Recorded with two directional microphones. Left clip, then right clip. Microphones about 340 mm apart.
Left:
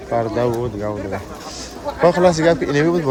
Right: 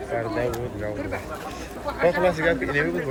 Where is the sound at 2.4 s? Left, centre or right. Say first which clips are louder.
Left 7 dB; centre.